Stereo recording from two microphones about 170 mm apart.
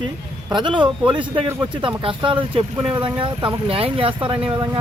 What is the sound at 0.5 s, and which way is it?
Speech, 25° right (ahead or behind).